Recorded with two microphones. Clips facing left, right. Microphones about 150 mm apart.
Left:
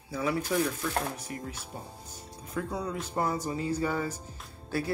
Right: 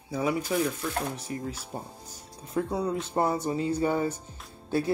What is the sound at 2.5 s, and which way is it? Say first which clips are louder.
Speech: right 5 dB; 30° right (ahead or behind).